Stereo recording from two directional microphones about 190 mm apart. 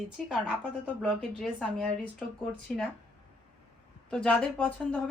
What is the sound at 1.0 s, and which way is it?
A woman's voice, 5° left (ahead or behind).